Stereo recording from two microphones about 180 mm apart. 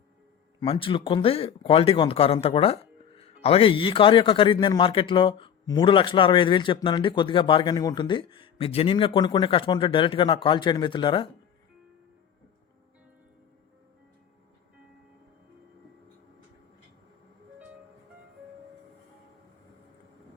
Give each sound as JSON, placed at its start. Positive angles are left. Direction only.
{"t": 0.6, "sound": "a man's voice", "side_deg": 30}